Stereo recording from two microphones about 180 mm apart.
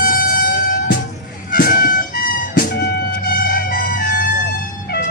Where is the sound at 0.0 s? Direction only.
50° left (ahead or behind).